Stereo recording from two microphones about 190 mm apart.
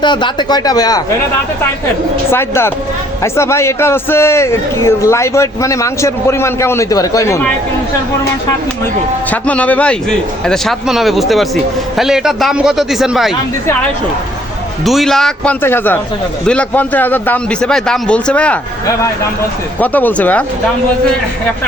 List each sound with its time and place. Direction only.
0.0 s speech: 25° left (ahead or behind)
2.3 s a man's voice: 10° left (ahead or behind)
9.3 s a man's voice: 10° left (ahead or behind)
14.8 s a man's voice: centre (ahead or behind)
19.8 s a man's voice: 10° left (ahead or behind)